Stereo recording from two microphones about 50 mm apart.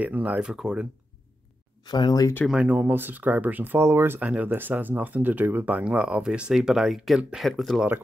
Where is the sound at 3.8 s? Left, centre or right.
Right.